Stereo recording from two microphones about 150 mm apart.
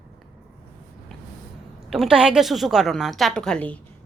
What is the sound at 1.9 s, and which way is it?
A woman's voice, centre (ahead or behind).